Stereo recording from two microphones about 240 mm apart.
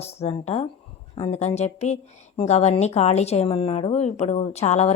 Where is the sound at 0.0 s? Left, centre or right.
Left.